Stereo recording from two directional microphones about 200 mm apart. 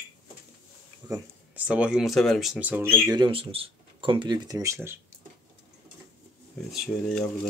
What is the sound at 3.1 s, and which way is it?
Speech, 25° right (ahead or behind).